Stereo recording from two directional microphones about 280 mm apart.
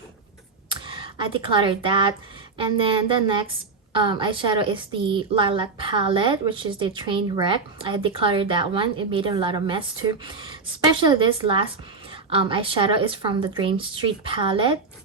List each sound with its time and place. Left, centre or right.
0.7 s a woman's voice: centre